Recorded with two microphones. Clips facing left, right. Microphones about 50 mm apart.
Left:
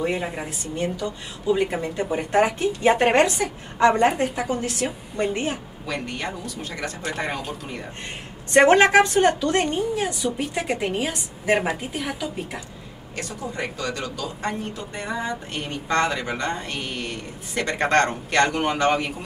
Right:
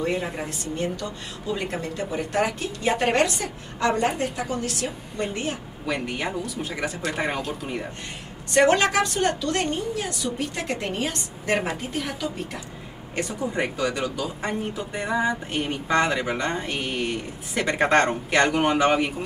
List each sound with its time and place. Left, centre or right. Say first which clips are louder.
0.0 s a woman's voice: left 1 dB; centre; by 5.6 s left
5.9 s speech: right 2 dB; centre
8.5 s a woman's voice: left 4 dB; left; by 12.3 s centre
13.3 s speech: right 3 dB; right